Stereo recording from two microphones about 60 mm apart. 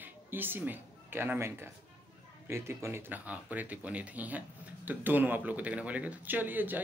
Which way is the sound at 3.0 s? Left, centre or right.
Right.